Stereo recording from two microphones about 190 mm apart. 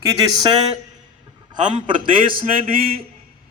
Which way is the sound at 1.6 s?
40° right (ahead or behind).